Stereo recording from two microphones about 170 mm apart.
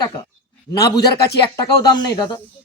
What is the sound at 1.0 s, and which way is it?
Speech, 75° left (ahead or behind).